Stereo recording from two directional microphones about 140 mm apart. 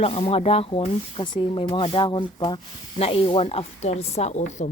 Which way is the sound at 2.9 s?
45° left (ahead or behind).